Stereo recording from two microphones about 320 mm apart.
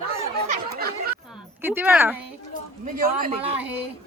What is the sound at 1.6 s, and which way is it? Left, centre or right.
Speech, centre.